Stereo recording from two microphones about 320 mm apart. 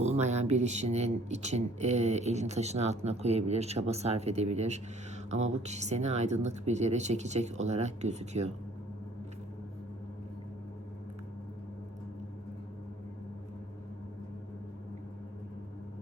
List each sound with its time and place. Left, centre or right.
0.0 s speech: right